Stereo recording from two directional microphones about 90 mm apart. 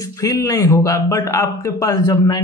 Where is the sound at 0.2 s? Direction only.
40° left (ahead or behind).